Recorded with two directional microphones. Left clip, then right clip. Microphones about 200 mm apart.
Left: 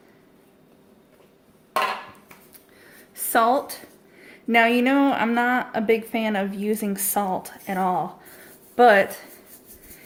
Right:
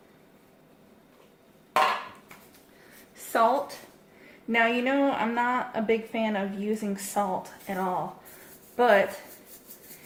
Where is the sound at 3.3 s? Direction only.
55° left (ahead or behind).